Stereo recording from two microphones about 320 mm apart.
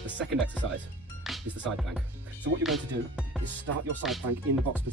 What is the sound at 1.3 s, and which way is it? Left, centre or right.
Music, centre.